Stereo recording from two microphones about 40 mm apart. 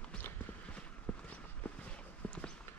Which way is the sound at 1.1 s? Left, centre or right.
Left.